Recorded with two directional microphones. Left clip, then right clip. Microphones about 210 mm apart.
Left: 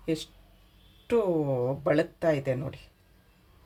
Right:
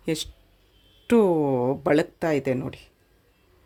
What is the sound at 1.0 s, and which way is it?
Speech, 55° right (ahead or behind).